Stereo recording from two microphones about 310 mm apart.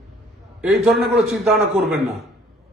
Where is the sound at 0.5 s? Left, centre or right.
Centre.